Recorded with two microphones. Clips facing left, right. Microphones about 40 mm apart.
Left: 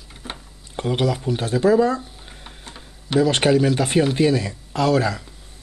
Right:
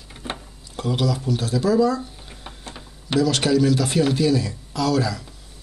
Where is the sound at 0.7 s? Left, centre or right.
Left.